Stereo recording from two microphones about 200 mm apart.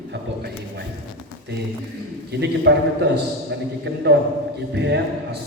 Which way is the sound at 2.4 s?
55° right (ahead or behind).